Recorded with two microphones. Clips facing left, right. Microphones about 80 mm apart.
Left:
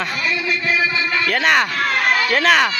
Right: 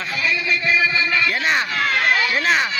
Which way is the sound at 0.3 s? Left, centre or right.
Left.